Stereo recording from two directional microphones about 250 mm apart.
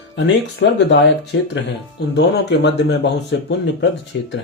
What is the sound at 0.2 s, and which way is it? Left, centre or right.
Speech, left.